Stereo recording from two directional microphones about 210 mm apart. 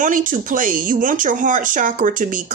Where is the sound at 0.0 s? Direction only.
40° right (ahead or behind).